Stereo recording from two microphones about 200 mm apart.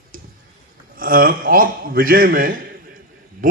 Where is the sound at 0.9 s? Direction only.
45° right (ahead or behind).